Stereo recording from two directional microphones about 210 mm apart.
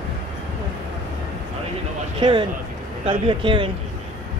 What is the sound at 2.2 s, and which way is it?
Speech, 20° right (ahead or behind).